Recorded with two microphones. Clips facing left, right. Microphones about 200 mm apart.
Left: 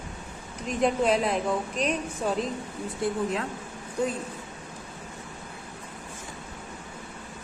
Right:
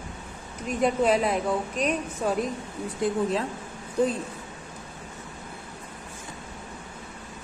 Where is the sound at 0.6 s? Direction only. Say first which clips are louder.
Right 1 dB; 5° right (ahead or behind).